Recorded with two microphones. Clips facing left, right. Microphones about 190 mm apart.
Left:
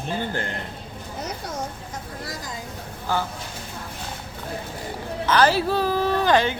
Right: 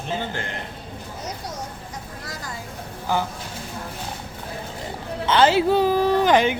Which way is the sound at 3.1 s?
15° right (ahead or behind).